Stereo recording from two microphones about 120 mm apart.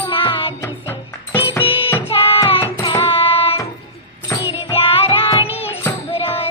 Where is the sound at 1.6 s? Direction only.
50° left (ahead or behind).